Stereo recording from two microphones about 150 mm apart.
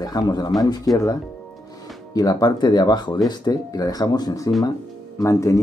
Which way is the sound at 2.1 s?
25° left (ahead or behind).